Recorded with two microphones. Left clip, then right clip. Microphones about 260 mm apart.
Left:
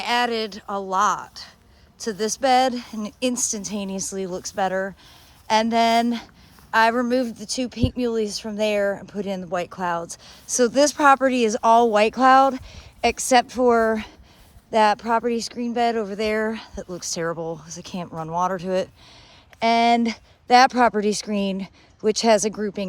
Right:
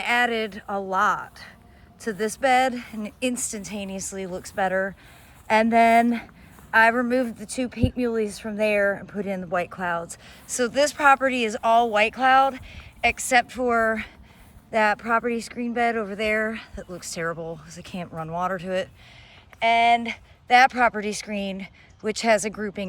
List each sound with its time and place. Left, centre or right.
0.0 s speech: centre